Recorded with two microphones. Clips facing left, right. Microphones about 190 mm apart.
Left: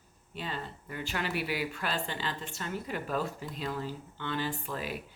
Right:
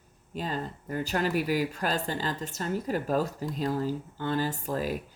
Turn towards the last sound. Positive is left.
turn(degrees=-40)  # may be behind; listen again after turning